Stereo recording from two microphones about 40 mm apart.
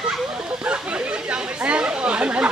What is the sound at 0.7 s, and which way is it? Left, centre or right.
Chatter, right.